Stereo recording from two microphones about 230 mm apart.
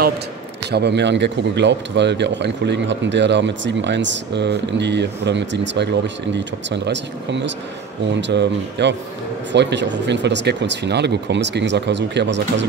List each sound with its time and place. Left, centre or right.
0.7 s speech: right